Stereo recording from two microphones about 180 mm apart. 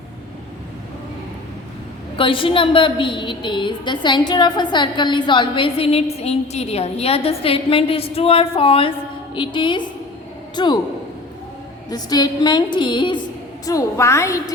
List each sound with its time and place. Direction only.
2.1 s a woman's voice: 30° left (ahead or behind)
11.9 s a woman's voice: 20° left (ahead or behind)